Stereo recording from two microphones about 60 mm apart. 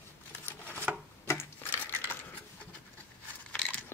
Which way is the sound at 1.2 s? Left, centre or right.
Left.